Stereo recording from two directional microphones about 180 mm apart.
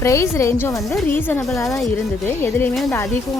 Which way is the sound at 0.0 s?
15° left (ahead or behind).